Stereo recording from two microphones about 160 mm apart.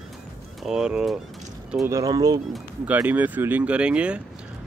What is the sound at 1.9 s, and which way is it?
Speech, 25° right (ahead or behind).